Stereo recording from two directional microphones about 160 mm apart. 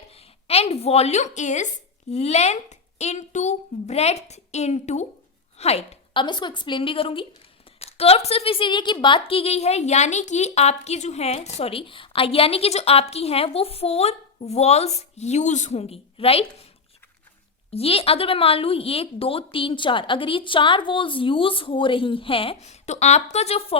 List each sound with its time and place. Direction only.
0.1 s a woman's voice: 40° left (ahead or behind)
6.2 s a woman's voice: 30° left (ahead or behind)
17.7 s a woman's voice: 40° left (ahead or behind)